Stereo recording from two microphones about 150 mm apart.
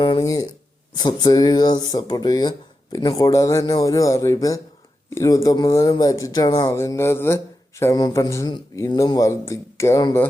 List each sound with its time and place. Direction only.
0.3 s speech: 25° left (ahead or behind)